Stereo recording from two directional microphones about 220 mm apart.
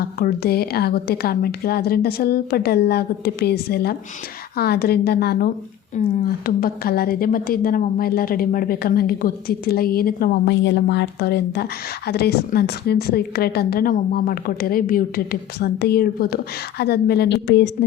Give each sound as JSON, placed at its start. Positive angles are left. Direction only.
{"t": 0.0, "sound": "a woman's voice", "side_deg": 45}
{"t": 6.0, "sound": "a woman's voice", "side_deg": 35}